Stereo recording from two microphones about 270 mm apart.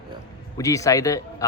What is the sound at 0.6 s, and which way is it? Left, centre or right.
Speech, centre.